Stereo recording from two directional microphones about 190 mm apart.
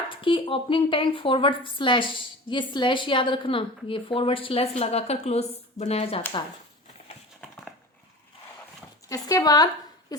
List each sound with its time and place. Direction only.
0.1 s a woman's voice: 25° left (ahead or behind)
9.0 s a woman's voice: 20° left (ahead or behind)